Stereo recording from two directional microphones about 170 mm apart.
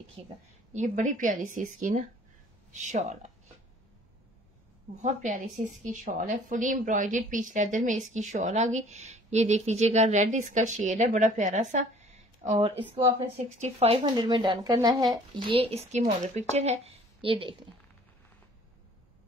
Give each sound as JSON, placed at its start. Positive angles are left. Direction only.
{"t": 0.2, "sound": "speech", "side_deg": -30}
{"t": 0.7, "sound": "a woman's voice", "side_deg": -45}
{"t": 5.0, "sound": "a woman's voice", "side_deg": -45}
{"t": 12.5, "sound": "speech", "side_deg": -30}